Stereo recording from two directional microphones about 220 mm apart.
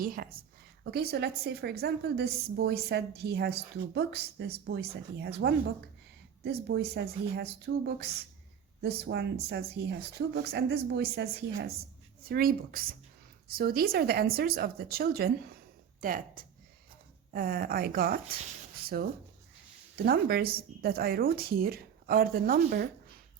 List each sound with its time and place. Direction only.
0.0 s a woman's voice: 40° right (ahead or behind)
20.1 s a woman's voice: 45° right (ahead or behind)